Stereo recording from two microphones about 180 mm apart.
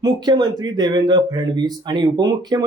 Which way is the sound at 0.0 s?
25° right (ahead or behind).